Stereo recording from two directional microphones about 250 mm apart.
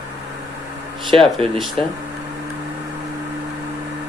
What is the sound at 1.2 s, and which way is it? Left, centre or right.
Speech, centre.